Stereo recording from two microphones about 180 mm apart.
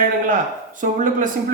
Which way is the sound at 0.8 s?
45° right (ahead or behind).